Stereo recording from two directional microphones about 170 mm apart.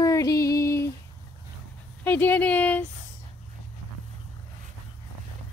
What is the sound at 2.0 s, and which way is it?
Speech, 10° left (ahead or behind).